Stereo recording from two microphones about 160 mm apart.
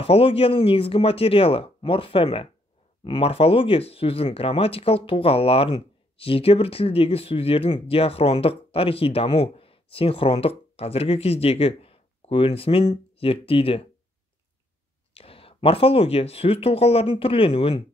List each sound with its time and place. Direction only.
0.0 s speech: 35° left (ahead or behind)
15.1 s speech: 35° left (ahead or behind)